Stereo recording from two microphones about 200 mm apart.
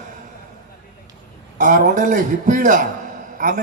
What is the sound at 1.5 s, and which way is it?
A man's voice, 40° right (ahead or behind).